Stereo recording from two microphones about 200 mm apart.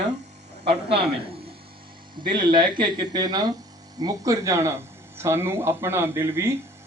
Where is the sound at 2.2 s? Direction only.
25° right (ahead or behind).